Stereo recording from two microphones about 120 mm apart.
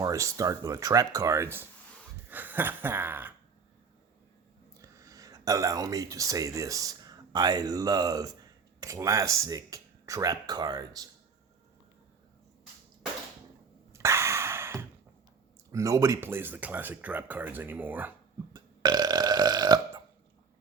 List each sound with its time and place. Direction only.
0.0 s speech: 25° right (ahead or behind)
4.8 s speech: 25° right (ahead or behind)
13.9 s a sound: 25° right (ahead or behind)
15.7 s speech: 30° right (ahead or behind)
18.5 s burping: 35° right (ahead or behind)